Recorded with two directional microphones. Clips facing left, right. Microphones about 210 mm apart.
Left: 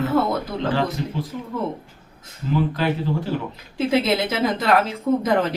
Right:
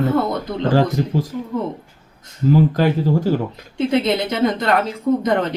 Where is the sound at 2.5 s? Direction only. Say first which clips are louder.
Right 5 dB; 45° right (ahead or behind).